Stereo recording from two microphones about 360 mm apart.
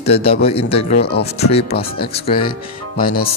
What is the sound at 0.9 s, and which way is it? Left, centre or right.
Speech, left.